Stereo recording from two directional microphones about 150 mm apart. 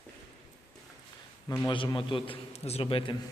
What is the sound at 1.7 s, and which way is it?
A man's voice, 35° left (ahead or behind).